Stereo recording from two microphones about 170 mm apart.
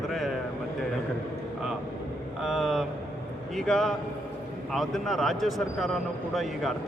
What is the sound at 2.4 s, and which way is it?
Speech, centre (ahead or behind).